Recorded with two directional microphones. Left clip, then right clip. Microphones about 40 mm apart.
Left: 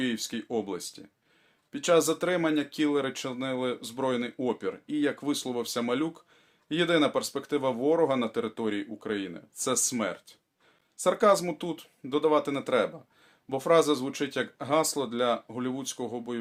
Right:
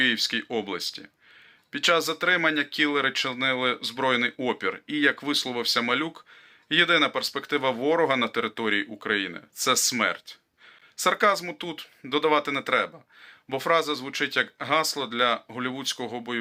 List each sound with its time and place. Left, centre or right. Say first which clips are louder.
0.0 s speech: right 9 dB; left
7.1 s speech: right 2 dB; left
15.5 s speech: right 4 dB; left